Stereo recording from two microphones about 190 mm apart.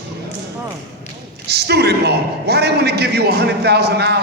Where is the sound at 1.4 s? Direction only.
60° right (ahead or behind).